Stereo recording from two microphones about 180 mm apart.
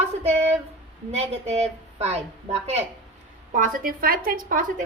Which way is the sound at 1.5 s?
35° right (ahead or behind).